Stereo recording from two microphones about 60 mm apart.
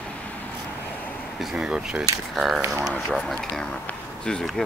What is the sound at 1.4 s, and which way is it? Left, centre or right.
Speech, centre.